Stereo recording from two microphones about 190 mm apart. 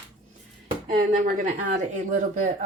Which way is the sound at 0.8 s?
45° right (ahead or behind).